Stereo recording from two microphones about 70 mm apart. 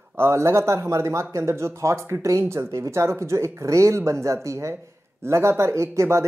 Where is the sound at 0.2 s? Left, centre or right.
Right.